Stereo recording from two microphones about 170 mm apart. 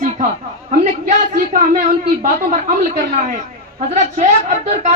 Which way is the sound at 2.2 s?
50° right (ahead or behind).